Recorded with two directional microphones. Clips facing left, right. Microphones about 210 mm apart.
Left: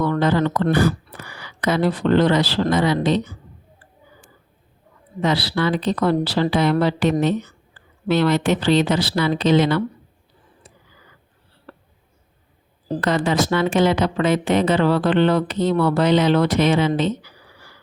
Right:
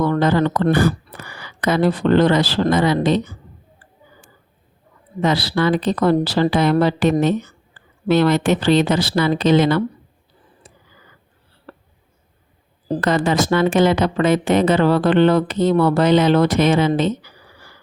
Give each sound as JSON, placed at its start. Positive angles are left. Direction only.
{"t": 0.0, "sound": "speech", "side_deg": -45}
{"t": 5.2, "sound": "a woman's voice", "side_deg": -45}
{"t": 11.7, "sound": "a sound", "side_deg": -40}
{"t": 13.0, "sound": "a woman's voice", "side_deg": -45}